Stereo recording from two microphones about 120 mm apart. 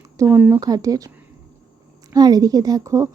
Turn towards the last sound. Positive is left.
turn(degrees=-25)  # may be behind; listen again after turning